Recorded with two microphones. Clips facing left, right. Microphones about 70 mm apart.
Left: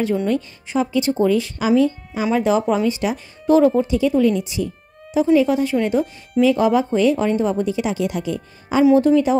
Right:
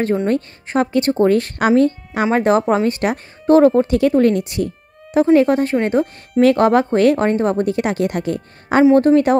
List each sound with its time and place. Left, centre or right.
0.3 s a woman's voice: right
6.4 s a woman's voice: right